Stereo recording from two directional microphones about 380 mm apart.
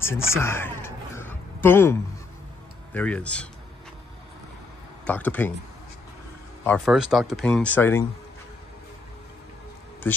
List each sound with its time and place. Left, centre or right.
0.0 s a sound: centre
2.9 s speech: centre
5.0 s speech: centre
6.6 s speech: centre